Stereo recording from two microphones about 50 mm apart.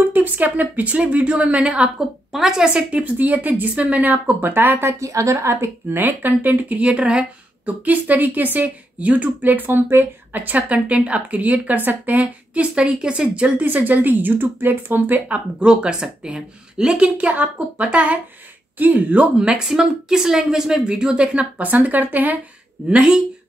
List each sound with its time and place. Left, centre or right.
0.1 s a woman's voice: right
2.0 s a woman's voice: centre
2.6 s speech: right
4.9 s a woman's voice: right
5.9 s speech: right
7.6 s speech: right
13.6 s speech: right
15.7 s a woman's voice: centre
19.3 s a woman's voice: centre; by 22.4 s right
22.8 s speech: centre